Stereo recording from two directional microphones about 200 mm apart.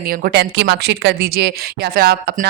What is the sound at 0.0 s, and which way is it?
Speech, 50° right (ahead or behind).